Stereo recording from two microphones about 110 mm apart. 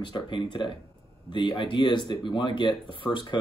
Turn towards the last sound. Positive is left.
turn(degrees=45)  # may be behind; listen again after turning